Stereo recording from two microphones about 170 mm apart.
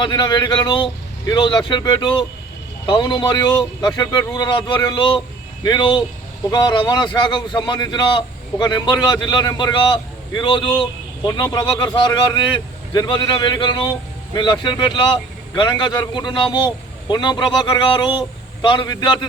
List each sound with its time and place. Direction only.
0.0 s a man's voice: 25° left (ahead or behind)